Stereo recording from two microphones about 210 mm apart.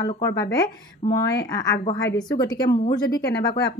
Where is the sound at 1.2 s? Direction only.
55° left (ahead or behind).